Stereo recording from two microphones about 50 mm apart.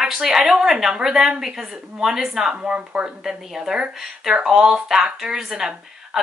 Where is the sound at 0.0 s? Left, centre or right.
Centre.